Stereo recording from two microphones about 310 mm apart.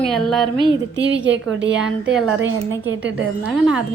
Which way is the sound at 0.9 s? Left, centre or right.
Right.